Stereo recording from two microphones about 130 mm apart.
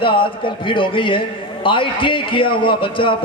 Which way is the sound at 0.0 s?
40° left (ahead or behind).